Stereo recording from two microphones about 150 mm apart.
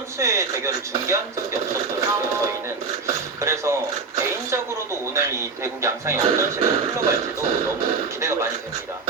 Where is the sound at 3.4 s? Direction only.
20° right (ahead or behind).